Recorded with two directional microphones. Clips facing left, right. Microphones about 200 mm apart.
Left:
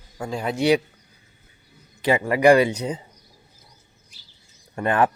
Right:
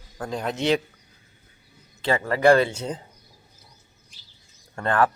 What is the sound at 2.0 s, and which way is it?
Speech, 15° left (ahead or behind).